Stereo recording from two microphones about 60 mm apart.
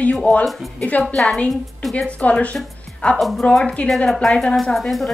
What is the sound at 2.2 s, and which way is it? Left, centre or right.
Speech, left.